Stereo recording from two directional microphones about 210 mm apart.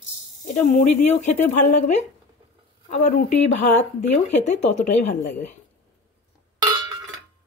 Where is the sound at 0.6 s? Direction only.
35° left (ahead or behind).